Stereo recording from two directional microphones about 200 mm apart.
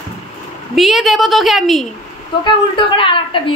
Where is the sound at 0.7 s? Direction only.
Centre (ahead or behind).